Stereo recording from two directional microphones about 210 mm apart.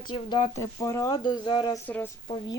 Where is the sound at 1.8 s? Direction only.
10° left (ahead or behind).